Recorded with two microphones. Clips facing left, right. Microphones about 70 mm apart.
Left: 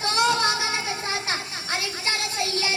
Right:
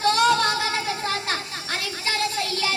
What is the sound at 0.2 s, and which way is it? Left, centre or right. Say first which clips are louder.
Music: right 2 dB; centre.